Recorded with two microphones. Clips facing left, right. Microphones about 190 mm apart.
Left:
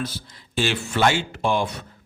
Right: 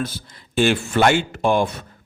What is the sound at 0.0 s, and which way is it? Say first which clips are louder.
Speech: right 3 dB; 55° right (ahead or behind).